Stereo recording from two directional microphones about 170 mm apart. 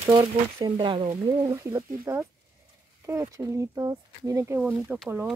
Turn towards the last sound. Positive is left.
turn(degrees=-5)  # may be behind; listen again after turning